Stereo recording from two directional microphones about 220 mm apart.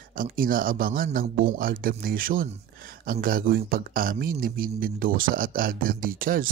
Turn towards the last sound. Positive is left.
turn(degrees=-40)  # may be behind; listen again after turning